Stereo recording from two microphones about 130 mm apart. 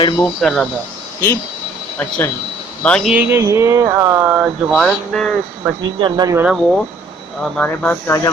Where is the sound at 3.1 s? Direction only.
10° right (ahead or behind).